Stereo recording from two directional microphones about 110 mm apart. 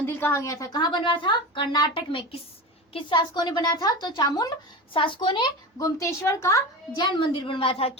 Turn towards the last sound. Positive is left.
turn(degrees=60)  # may be behind; listen again after turning